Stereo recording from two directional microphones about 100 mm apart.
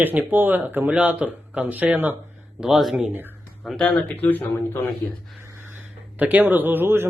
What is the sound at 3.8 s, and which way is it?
Speech, 15° left (ahead or behind).